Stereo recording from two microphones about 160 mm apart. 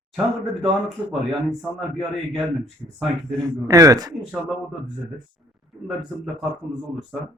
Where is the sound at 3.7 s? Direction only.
20° right (ahead or behind).